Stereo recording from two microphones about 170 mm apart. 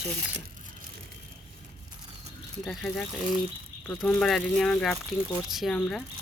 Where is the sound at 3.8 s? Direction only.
5° left (ahead or behind).